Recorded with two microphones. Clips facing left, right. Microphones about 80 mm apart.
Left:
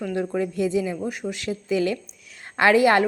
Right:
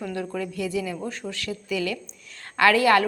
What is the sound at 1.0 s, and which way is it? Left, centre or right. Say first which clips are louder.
A woman's voice: left 3 dB; centre.